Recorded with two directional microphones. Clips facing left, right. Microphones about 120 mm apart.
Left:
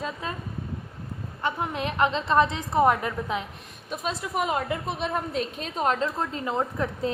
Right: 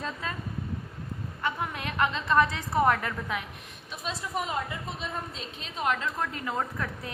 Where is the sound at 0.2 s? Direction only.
20° left (ahead or behind).